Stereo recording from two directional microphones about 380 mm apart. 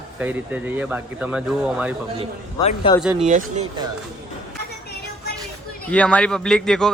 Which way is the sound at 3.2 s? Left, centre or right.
Centre.